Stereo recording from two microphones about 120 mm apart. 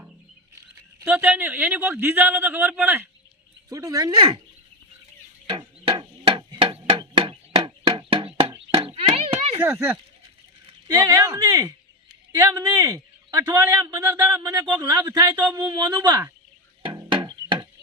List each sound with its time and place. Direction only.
1.1 s speech: 15° right (ahead or behind)
3.7 s speech: 30° right (ahead or behind)
5.5 s a sound: 50° right (ahead or behind)
7.0 s knock: 40° right (ahead or behind)
9.6 s a man's voice: 20° right (ahead or behind); by 16.0 s 35° right (ahead or behind)
16.8 s music: 45° right (ahead or behind)